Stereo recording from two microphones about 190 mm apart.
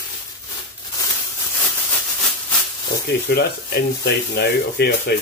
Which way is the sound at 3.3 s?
60° left (ahead or behind).